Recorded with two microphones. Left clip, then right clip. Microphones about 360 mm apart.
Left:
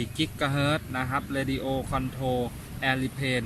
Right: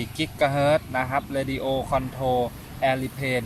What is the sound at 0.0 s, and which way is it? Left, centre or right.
Speech, centre.